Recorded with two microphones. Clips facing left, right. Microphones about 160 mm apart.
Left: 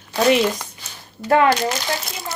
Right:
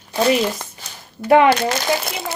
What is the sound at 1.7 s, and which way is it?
Speech, 65° right (ahead or behind).